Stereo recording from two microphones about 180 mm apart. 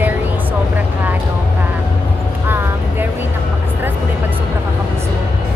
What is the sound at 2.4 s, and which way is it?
Speech, 10° right (ahead or behind).